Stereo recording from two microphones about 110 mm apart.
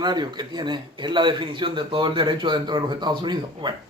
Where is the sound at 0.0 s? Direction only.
40° right (ahead or behind).